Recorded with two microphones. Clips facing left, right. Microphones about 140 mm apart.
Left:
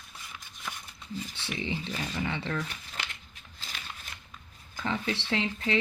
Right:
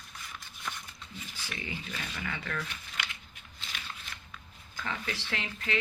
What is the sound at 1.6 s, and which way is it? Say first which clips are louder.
Speech: left 6 dB; 30° left (ahead or behind).